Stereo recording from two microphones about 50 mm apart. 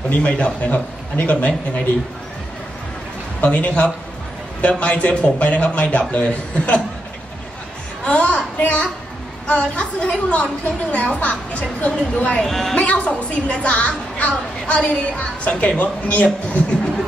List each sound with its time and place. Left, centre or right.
0.1 s a woman's voice: left
3.3 s a woman's voice: left
8.0 s a sound: left
9.5 s a woman's voice: left
12.4 s a woman's voice: centre
12.7 s a woman's voice: left